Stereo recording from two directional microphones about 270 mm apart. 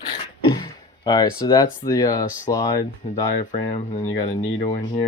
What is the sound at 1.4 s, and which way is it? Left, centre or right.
Speech, centre.